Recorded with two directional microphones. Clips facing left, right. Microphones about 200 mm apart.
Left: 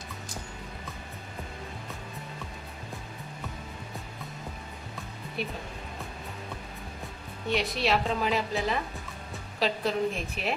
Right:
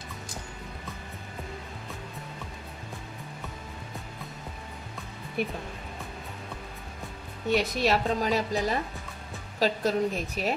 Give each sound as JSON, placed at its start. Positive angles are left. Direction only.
{"t": 5.4, "sound": "speech", "side_deg": -50}
{"t": 7.4, "sound": "a woman's voice", "side_deg": -45}